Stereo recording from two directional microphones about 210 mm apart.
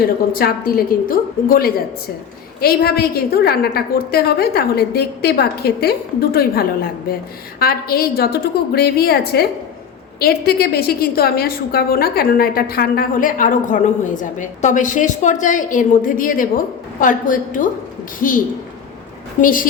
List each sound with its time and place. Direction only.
0.3 s a woman's voice: 45° left (ahead or behind)